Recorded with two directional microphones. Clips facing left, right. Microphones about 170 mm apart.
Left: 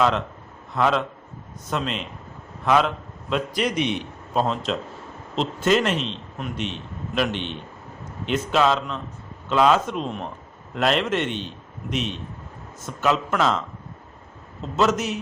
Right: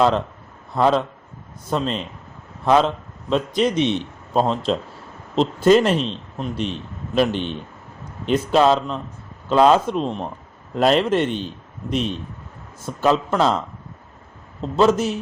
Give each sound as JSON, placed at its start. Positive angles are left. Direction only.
{"t": 0.7, "sound": "a man's voice", "side_deg": -35}
{"t": 14.6, "sound": "a man's voice", "side_deg": -30}